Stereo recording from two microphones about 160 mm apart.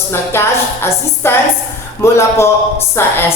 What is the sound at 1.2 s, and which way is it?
Speech, 15° left (ahead or behind).